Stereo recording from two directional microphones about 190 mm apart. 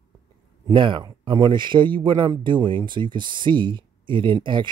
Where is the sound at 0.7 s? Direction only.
25° right (ahead or behind).